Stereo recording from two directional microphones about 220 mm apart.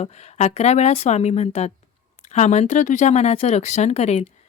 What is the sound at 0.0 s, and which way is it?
Speech, 30° left (ahead or behind).